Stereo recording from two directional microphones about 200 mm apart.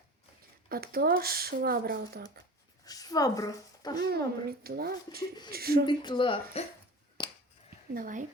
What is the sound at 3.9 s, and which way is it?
Speech, 50° right (ahead or behind).